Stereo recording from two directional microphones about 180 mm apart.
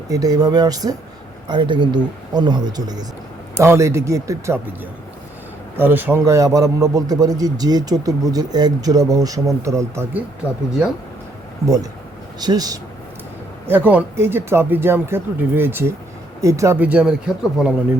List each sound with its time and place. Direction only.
0.1 s a man's voice: 20° right (ahead or behind)
5.7 s a man's voice: 10° right (ahead or behind)
11.6 s a man's voice: 15° right (ahead or behind)
13.7 s speech: 10° right (ahead or behind)